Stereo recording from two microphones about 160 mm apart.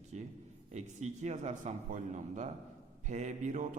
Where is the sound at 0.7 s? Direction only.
45° right (ahead or behind).